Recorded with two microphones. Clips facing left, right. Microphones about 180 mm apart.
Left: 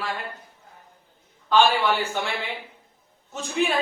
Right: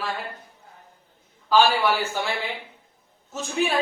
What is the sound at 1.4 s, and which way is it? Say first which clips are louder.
Speech: even; 5° right (ahead or behind).